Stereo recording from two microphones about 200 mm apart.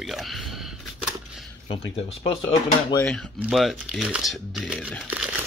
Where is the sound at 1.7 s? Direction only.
25° left (ahead or behind).